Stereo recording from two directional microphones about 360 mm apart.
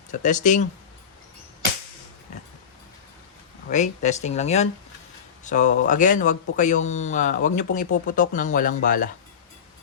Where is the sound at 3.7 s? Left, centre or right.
Centre.